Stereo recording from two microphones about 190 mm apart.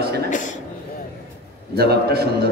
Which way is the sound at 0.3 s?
40° left (ahead or behind).